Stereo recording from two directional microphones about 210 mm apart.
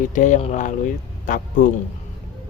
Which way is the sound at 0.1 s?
35° left (ahead or behind).